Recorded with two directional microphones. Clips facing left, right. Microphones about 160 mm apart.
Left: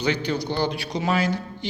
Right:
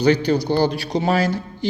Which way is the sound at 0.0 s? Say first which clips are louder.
Right 8 dB; 40° right (ahead or behind).